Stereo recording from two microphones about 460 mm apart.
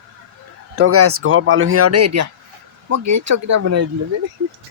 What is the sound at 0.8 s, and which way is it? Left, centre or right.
Speech, right.